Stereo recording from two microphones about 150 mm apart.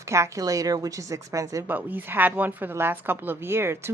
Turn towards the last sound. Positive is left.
turn(degrees=-15)  # may be behind; listen again after turning